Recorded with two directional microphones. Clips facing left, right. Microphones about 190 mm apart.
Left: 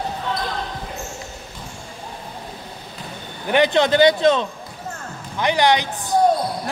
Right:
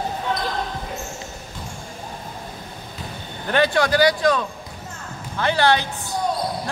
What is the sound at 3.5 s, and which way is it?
A man's voice, 20° left (ahead or behind).